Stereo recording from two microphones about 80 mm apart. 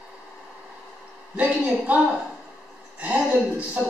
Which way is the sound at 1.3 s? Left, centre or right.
Centre.